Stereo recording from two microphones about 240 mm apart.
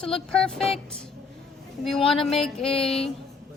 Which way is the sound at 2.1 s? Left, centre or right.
Centre.